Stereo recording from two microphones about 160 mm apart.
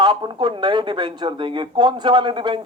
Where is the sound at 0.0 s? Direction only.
30° right (ahead or behind).